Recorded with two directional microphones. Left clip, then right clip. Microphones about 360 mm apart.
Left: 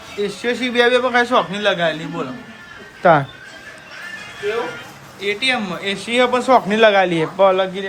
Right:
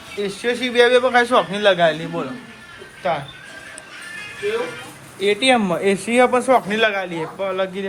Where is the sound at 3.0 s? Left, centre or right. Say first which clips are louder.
Left 9 dB; left.